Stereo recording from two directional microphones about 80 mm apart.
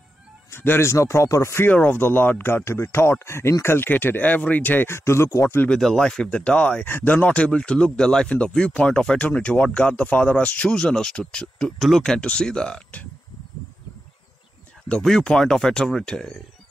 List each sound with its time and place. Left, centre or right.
0.5 s speech: left
5.7 s speech: centre
15.0 s speech: centre